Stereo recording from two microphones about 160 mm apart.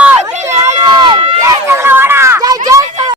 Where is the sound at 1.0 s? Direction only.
25° right (ahead or behind).